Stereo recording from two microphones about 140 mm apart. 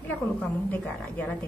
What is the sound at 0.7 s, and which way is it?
Speech, 10° left (ahead or behind).